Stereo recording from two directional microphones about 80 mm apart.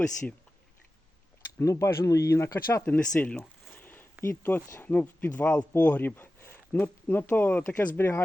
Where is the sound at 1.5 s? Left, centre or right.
Left.